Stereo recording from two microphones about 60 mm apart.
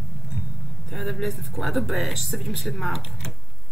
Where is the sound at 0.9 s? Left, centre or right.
Centre.